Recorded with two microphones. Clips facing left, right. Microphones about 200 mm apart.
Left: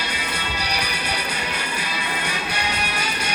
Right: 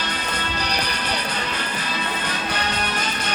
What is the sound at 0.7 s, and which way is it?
Music, 10° left (ahead or behind).